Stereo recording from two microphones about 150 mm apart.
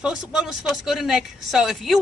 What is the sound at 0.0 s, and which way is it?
Speech, 5° right (ahead or behind).